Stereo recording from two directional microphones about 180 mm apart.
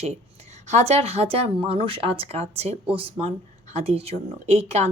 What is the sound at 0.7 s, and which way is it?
A woman's voice, 40° right (ahead or behind).